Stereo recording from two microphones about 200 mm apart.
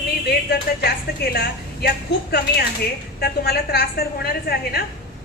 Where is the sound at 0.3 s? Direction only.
50° left (ahead or behind).